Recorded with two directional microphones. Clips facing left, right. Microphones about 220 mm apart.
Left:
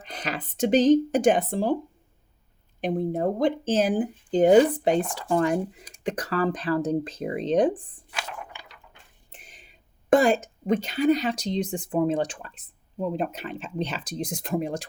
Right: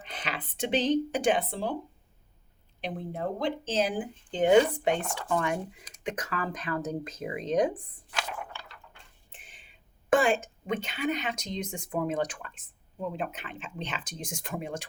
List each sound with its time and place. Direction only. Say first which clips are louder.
0.0 s speech: left 5 dB; 40° left (ahead or behind)
2.8 s speech: left 9 dB; 45° left (ahead or behind)
8.5 s a sound: even; 15° left (ahead or behind)
9.3 s speech: left 6 dB; 40° left (ahead or behind)